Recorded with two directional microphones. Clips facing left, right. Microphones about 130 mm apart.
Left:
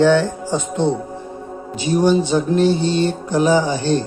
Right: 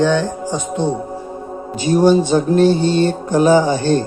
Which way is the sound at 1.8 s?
45° right (ahead or behind).